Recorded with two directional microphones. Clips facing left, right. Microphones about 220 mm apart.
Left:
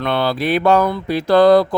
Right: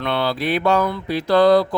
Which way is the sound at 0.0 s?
45° left (ahead or behind).